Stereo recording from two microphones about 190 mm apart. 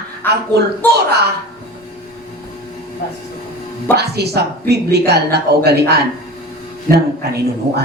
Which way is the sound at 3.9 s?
60° right (ahead or behind).